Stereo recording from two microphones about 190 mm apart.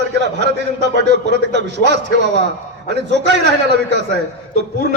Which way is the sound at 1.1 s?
65° right (ahead or behind).